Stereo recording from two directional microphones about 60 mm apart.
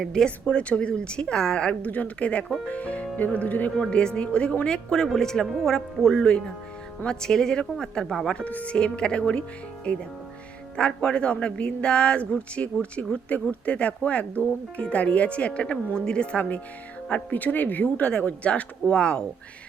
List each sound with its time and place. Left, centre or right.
0.0 s music: centre
0.3 s speech: left
3.8 s music: centre
8.4 s music: left
9.9 s speech: centre
10.8 s music: centre
13.2 s speech: left
17.1 s music: centre
17.3 s speech: left
18.1 s music: left